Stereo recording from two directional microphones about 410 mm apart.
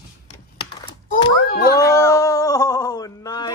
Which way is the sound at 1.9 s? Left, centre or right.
Centre.